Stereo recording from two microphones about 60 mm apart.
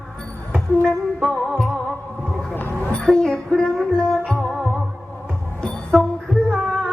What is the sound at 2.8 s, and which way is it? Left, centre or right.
Music, centre.